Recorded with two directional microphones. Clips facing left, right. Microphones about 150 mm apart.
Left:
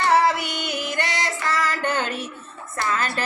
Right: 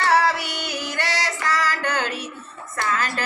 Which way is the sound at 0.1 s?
20° left (ahead or behind).